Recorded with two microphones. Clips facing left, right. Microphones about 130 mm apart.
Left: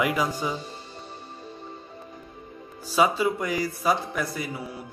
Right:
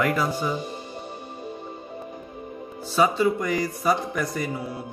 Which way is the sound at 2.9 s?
10° left (ahead or behind).